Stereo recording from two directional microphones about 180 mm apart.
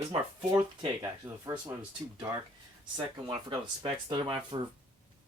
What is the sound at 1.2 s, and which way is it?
Speech, 10° right (ahead or behind).